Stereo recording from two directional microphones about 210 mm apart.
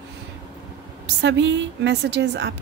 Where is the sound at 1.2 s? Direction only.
60° right (ahead or behind).